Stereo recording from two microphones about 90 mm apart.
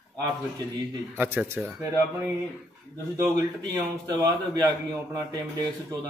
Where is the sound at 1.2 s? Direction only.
20° right (ahead or behind).